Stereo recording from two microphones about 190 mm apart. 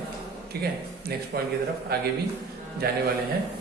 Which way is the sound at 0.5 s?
55° right (ahead or behind).